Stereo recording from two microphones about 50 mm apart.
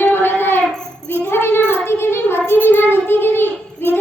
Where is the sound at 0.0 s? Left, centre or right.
Left.